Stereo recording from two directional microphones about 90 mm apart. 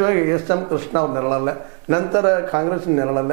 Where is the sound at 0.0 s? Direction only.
20° right (ahead or behind).